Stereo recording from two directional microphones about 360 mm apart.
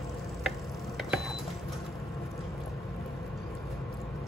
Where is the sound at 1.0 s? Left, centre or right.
Centre.